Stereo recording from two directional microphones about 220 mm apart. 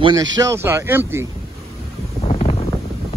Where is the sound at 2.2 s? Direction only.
30° left (ahead or behind).